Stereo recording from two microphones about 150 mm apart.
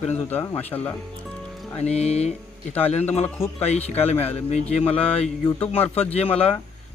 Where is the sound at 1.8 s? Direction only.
45° left (ahead or behind).